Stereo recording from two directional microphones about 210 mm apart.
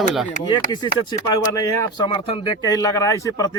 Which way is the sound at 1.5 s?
15° left (ahead or behind).